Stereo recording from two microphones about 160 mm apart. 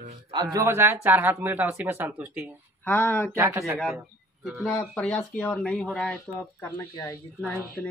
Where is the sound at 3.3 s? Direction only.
15° right (ahead or behind).